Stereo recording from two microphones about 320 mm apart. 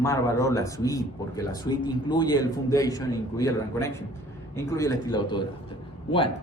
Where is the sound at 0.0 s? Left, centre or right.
Centre.